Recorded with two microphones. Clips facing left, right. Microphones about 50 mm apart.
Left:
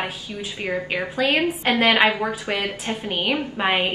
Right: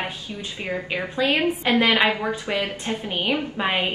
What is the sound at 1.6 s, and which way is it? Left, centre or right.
A woman's voice, left.